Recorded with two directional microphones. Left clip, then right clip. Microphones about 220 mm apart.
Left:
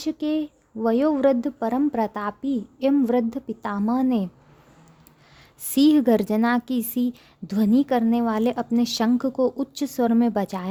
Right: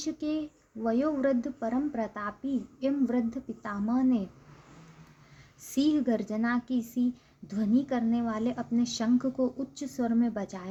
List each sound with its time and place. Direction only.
0.0 s a woman's voice: 45° left (ahead or behind)
5.7 s a woman's voice: 50° left (ahead or behind)